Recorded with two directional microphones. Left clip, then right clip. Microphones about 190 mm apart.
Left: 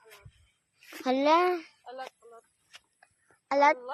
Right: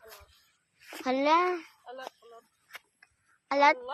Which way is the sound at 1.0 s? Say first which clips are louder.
Left 1 dB; 20° left (ahead or behind).